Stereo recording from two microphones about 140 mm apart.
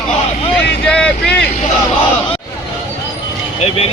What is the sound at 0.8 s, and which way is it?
Speech, 5° left (ahead or behind).